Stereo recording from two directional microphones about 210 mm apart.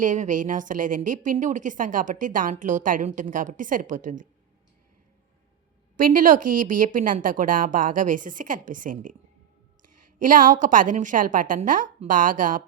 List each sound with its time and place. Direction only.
0.0 s a woman's voice: 35° right (ahead or behind)
6.0 s a woman's voice: 40° right (ahead or behind)